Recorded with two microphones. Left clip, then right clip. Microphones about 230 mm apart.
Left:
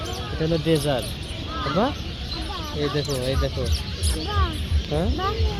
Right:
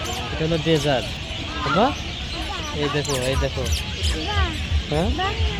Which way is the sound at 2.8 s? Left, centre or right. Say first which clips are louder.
Right 2 dB; centre.